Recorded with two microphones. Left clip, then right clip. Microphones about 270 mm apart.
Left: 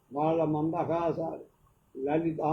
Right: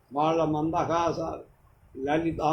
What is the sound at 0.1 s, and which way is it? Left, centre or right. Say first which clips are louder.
Speech: right 3 dB; right.